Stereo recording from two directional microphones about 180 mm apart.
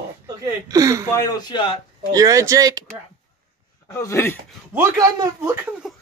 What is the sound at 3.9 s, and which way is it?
Speech, 15° left (ahead or behind).